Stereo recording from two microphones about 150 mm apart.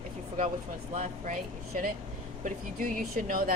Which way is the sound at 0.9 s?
55° right (ahead or behind).